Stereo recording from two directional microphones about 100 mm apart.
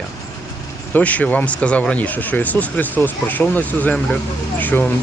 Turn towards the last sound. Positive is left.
turn(degrees=15)  # may be behind; listen again after turning